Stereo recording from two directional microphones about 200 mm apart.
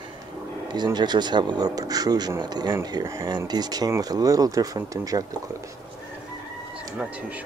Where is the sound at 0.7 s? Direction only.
20° right (ahead or behind).